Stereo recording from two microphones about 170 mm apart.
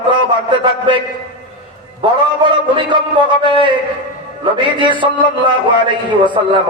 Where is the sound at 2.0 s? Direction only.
30° right (ahead or behind).